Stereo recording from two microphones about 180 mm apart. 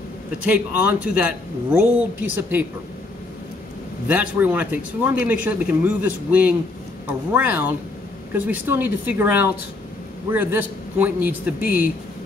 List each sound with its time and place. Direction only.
0.5 s speech: 5° right (ahead or behind)
4.1 s speech: 10° right (ahead or behind)